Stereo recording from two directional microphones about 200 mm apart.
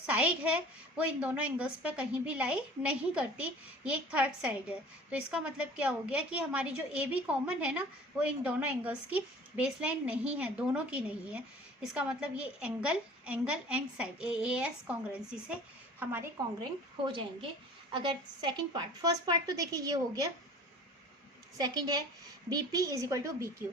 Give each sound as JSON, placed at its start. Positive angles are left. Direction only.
{"t": 0.0, "sound": "a woman's voice", "side_deg": -5}
{"t": 17.9, "sound": "a woman's voice", "side_deg": -25}
{"t": 21.6, "sound": "a woman's voice", "side_deg": -20}